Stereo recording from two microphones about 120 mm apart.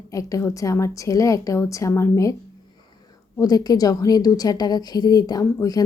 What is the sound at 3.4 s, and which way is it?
A woman's voice, 30° left (ahead or behind).